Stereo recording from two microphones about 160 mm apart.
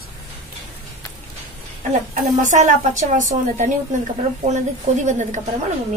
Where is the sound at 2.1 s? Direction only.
50° right (ahead or behind).